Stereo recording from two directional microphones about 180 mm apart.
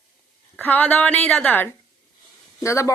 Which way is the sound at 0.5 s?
10° left (ahead or behind).